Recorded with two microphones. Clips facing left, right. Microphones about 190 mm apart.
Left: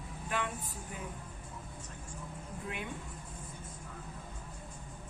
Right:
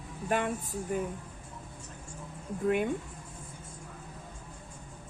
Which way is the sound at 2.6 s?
50° right (ahead or behind).